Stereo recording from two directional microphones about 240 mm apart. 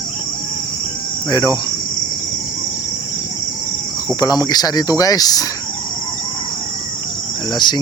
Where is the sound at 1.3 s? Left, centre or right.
Centre.